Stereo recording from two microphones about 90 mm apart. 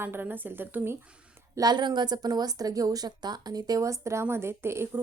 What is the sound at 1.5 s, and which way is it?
Speech, 50° right (ahead or behind).